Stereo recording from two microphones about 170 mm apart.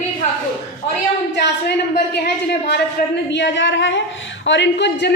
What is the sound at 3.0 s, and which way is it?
Speech, 55° left (ahead or behind).